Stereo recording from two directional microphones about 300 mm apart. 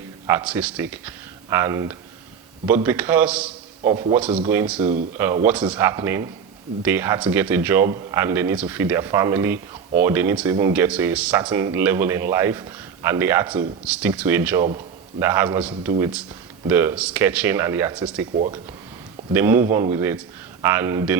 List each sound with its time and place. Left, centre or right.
0.3 s a man's voice: centre
18.3 s speech: centre
19.3 s speech: centre